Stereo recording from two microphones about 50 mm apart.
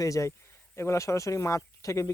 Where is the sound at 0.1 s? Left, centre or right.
Left.